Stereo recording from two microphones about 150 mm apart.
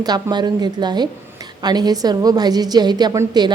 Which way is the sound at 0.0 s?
25° right (ahead or behind).